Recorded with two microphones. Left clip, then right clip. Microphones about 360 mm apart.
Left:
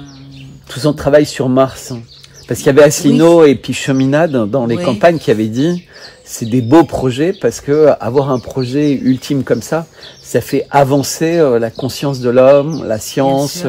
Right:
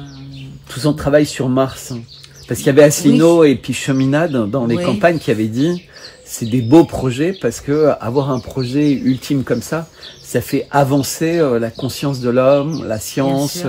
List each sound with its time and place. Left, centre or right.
0.7 s speech: left